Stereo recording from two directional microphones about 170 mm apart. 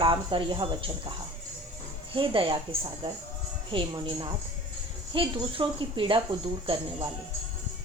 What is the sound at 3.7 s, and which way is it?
Speech, 25° right (ahead or behind).